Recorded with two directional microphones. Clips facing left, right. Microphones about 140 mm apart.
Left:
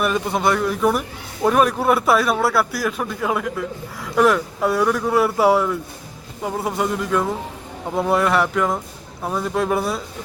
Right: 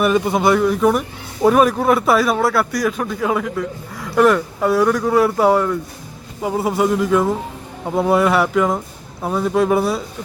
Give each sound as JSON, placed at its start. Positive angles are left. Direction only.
{"t": 0.0, "sound": "a man's voice", "side_deg": 0}